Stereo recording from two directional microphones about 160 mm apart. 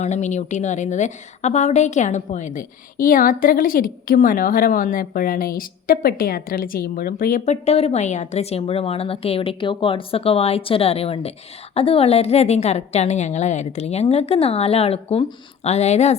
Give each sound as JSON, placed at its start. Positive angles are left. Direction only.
{"t": 0.0, "sound": "a woman's voice", "side_deg": 45}